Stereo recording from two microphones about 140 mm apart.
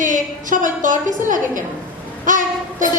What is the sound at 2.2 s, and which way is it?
Child singing, 65° right (ahead or behind).